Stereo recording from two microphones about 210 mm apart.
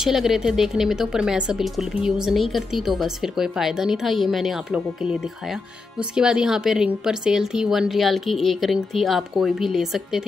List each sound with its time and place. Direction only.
0.0 s speech: centre (ahead or behind)